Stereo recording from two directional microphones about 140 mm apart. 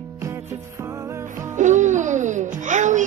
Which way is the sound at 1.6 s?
60° right (ahead or behind).